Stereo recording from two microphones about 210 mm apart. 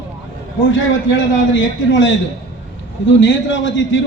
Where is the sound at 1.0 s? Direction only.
60° left (ahead or behind).